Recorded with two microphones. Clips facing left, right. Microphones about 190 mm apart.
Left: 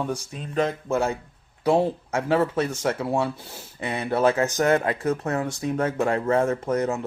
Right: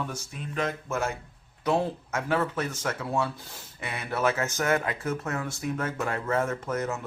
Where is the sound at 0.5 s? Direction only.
30° left (ahead or behind).